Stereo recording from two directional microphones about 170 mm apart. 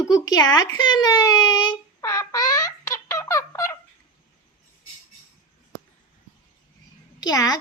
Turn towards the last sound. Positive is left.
turn(degrees=20)  # may be behind; listen again after turning